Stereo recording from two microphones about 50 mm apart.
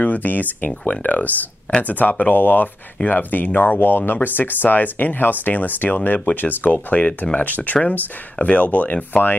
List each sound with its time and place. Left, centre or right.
0.0 s speech: left